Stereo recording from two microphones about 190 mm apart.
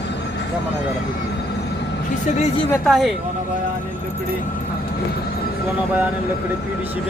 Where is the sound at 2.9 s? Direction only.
Centre (ahead or behind).